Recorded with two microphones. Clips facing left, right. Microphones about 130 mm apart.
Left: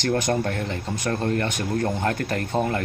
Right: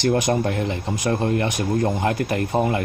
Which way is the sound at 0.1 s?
15° right (ahead or behind).